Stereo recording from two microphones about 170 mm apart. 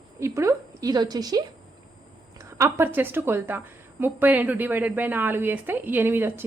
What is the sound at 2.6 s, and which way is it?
A woman's voice, 15° right (ahead or behind).